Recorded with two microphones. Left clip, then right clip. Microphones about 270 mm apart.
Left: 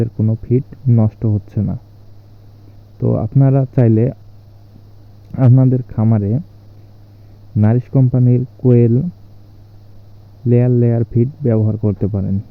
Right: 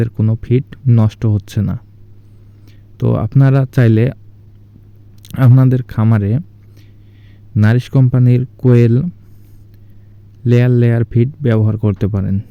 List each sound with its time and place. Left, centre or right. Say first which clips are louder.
0.0 s speech: right 1 dB; right
3.0 s speech: right 1 dB; right
5.3 s speech: even; right
7.5 s speech: right 1 dB; right
10.6 s speech: right 1 dB; right